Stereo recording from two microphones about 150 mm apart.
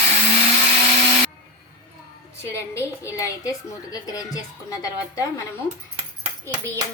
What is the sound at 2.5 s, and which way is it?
A woman's voice, 20° left (ahead or behind).